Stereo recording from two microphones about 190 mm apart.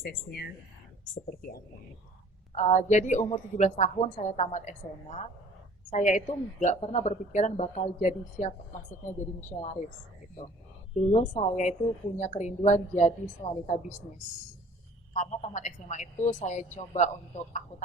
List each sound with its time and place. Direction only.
0.0 s speech: 55° left (ahead or behind)
2.6 s a man's voice: 40° left (ahead or behind)
11.1 s a man's voice: 35° left (ahead or behind)
15.1 s a man's voice: 40° left (ahead or behind)